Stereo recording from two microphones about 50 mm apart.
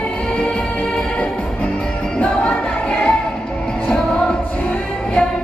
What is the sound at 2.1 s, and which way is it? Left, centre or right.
Music, left.